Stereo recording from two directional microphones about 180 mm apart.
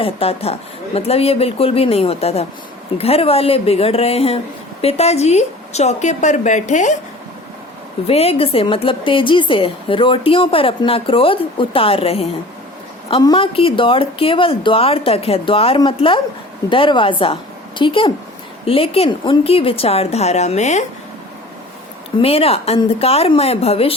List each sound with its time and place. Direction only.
0.0 s a woman's voice: 35° left (ahead or behind)
8.0 s a woman's voice: 35° left (ahead or behind)
22.2 s a woman's voice: 35° left (ahead or behind)